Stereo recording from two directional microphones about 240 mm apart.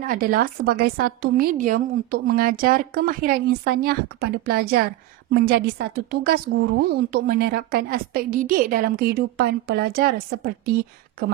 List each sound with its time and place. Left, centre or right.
0.0 s a woman's voice: right